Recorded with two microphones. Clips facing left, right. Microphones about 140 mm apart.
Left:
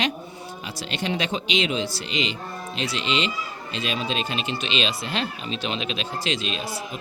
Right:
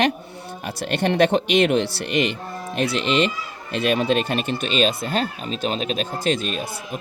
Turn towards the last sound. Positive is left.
turn(degrees=-50)  # may be behind; listen again after turning